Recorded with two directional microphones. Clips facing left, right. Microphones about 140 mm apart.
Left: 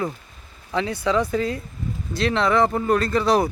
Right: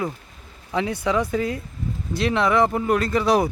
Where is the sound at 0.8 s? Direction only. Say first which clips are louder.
Left 1 dB; 15° right (ahead or behind).